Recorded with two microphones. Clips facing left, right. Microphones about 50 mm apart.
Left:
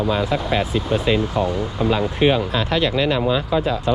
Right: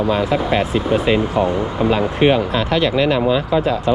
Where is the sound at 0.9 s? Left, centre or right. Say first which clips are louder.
Right 3 dB; right.